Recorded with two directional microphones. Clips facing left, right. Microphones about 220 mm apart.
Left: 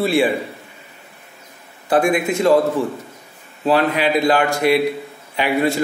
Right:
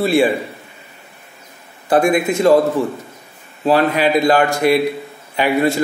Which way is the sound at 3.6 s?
40° right (ahead or behind).